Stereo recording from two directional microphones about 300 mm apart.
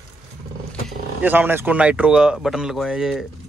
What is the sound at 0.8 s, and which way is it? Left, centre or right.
Speech, centre.